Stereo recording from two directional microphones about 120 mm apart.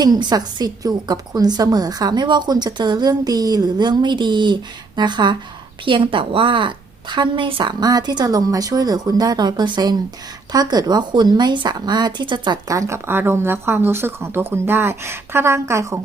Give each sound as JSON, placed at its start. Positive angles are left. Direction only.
{"t": 0.0, "sound": "a woman's voice", "side_deg": -35}